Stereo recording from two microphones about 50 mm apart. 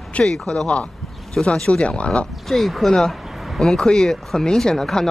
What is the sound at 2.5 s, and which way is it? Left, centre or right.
Speech, centre.